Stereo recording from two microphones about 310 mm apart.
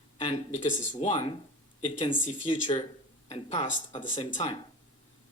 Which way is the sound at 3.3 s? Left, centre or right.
Centre.